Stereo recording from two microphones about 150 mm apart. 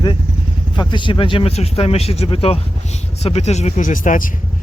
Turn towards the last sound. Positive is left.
turn(degrees=60)  # may be behind; listen again after turning